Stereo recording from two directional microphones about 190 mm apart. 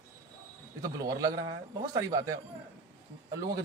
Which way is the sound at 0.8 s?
20° right (ahead or behind).